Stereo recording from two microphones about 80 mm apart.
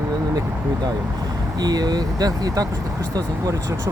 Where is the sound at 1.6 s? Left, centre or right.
Right.